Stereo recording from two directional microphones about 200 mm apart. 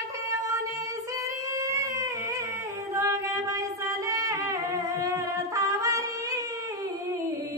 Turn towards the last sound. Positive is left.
turn(degrees=-15)  # may be behind; listen again after turning